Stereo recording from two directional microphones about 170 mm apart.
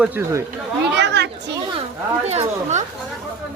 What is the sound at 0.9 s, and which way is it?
Chatter, 85° right.